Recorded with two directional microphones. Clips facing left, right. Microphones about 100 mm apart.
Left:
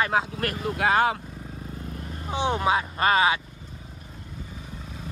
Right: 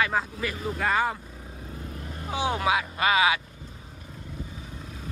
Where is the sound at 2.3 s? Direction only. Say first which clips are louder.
Left 2 dB; 25° left (ahead or behind).